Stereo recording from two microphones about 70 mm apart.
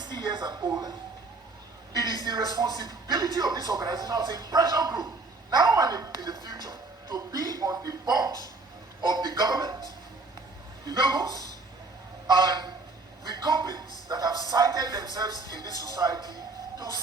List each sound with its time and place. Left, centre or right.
0.0 s speech: right
2.1 s speech: right
9.0 s speech: right
10.8 s speech: right
12.3 s honk: right
13.4 s a man's voice: right
14.1 s speech: right